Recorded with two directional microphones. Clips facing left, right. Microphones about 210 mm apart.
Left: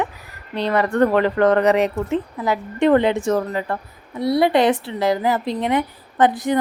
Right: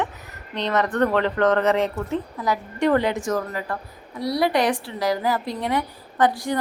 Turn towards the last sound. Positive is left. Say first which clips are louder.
# left 4 dB
turn(degrees=20)  # may be behind; listen again after turning